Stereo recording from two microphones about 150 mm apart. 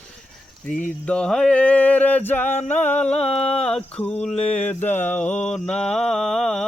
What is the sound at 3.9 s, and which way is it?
Male singing, 10° left (ahead or behind).